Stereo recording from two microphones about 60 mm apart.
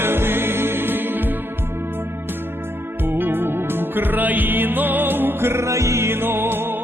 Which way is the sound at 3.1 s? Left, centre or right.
Right.